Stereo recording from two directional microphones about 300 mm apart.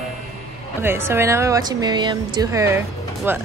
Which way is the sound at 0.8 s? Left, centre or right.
Centre.